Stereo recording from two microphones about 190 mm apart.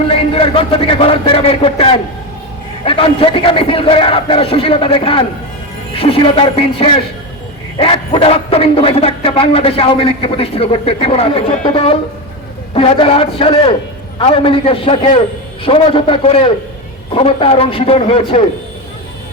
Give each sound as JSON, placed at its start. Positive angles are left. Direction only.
{"t": 0.1, "sound": "a man's voice", "side_deg": 30}